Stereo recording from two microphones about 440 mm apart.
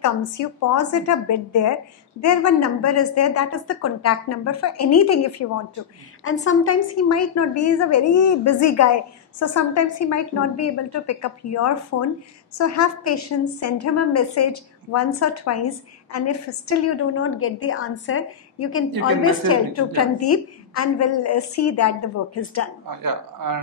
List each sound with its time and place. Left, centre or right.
0.0 s a woman's voice: left
6.6 s a woman's voice: left
22.8 s speech: right